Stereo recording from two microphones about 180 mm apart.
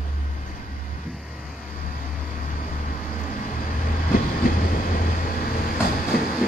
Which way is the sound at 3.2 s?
45° left (ahead or behind).